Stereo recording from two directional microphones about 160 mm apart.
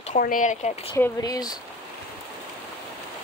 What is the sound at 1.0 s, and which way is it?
Speech, 20° left (ahead or behind).